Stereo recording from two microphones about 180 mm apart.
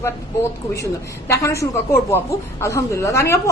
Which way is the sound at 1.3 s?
15° left (ahead or behind).